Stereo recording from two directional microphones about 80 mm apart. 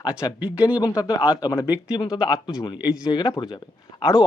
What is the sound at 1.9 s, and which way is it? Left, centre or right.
Speech, left.